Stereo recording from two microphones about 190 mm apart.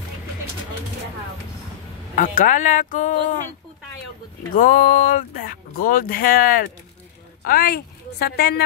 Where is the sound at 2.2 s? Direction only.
45° left (ahead or behind).